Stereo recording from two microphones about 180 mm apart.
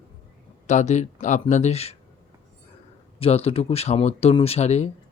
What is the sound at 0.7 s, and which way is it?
Speech, 40° left (ahead or behind).